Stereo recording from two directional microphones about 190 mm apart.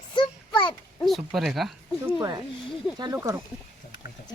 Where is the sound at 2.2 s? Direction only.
20° right (ahead or behind).